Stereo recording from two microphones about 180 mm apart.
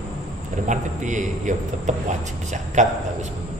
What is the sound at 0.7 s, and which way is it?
A man's voice, 45° right (ahead or behind).